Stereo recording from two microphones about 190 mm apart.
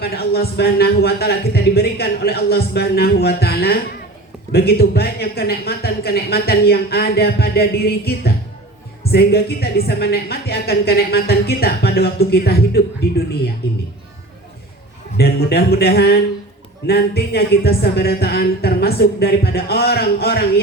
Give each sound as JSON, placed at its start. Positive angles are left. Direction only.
{"t": 0.0, "sound": "speech", "side_deg": 55}
{"t": 15.2, "sound": "speech", "side_deg": 55}